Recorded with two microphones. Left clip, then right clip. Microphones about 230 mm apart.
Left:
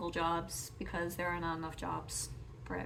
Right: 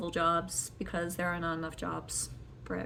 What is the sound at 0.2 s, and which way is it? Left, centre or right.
Speech, left.